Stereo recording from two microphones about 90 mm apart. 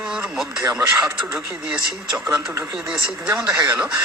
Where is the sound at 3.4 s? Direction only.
35° right (ahead or behind).